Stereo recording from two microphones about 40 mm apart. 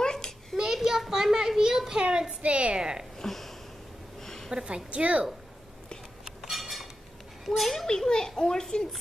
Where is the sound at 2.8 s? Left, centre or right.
Centre.